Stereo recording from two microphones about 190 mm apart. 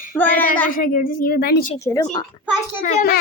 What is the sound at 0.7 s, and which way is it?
Speech, 45° left (ahead or behind).